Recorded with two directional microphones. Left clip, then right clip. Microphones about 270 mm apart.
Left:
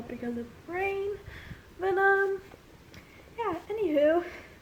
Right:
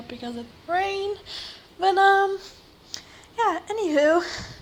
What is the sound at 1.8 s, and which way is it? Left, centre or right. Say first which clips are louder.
Female singing: right 7 dB; centre.